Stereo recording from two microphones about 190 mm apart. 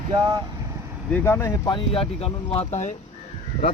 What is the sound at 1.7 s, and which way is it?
Speech, 25° left (ahead or behind).